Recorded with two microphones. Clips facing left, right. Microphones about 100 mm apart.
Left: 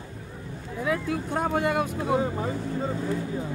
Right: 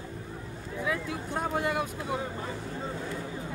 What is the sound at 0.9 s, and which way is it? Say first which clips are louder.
Vehicle: left 6 dB; 55° left (ahead or behind).